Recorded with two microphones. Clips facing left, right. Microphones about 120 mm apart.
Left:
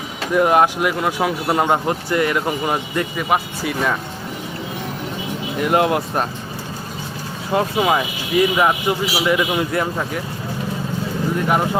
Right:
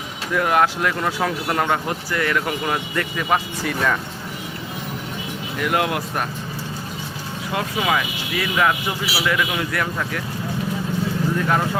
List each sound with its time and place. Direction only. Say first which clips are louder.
0.3 s speech: left 4 dB; 20° left (ahead or behind)
5.5 s speech: left 5 dB; 25° left (ahead or behind)
7.5 s speech: left 5 dB; 25° left (ahead or behind)
11.3 s speech: left 4 dB; 15° left (ahead or behind)